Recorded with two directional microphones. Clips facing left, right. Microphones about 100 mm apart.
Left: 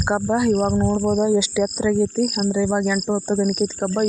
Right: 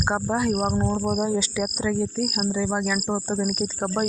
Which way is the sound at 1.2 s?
15° left (ahead or behind).